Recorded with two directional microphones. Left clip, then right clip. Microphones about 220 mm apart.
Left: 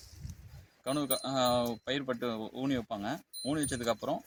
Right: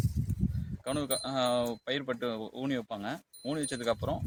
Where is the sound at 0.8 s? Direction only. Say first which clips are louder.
Even; 10° right (ahead or behind).